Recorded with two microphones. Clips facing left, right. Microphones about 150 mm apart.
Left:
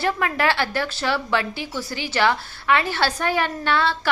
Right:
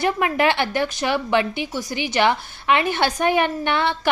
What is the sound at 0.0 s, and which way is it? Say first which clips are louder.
A woman's voice: right 3 dB; 20° right (ahead or behind).